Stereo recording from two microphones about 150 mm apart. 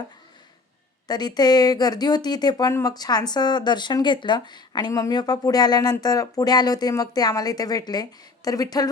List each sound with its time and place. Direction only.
1.0 s speech: 25° left (ahead or behind)